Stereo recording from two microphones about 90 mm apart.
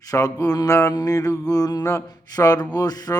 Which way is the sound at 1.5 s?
45° left (ahead or behind).